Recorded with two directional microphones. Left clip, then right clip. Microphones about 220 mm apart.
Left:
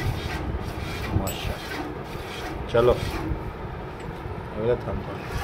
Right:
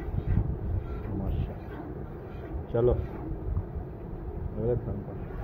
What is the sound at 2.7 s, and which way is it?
Speech, centre (ahead or behind).